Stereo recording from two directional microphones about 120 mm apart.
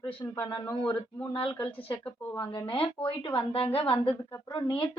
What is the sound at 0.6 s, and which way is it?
Speech, 15° left (ahead or behind).